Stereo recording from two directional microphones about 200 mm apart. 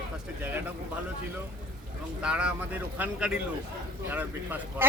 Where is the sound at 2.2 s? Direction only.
5° right (ahead or behind).